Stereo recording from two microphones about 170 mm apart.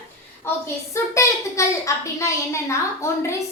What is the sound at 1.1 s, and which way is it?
A woman's voice, 20° left (ahead or behind).